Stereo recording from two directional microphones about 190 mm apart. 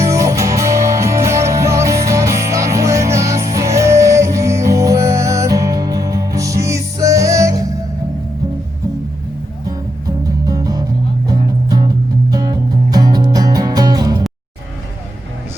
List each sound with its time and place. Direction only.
0.0 s music: 15° right (ahead or behind)
10.4 s music: 20° right (ahead or behind)